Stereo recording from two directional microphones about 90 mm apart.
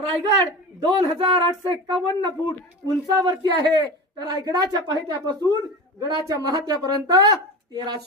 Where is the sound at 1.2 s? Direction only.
75° right (ahead or behind).